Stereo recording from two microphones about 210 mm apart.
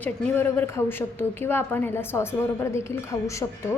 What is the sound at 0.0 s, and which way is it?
A woman's voice, 10° left (ahead or behind).